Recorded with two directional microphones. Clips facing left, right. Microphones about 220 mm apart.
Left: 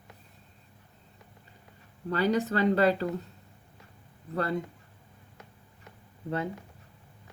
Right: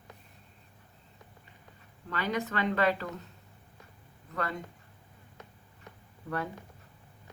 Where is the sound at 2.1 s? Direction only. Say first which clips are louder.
Left 6 dB; 35° left (ahead or behind).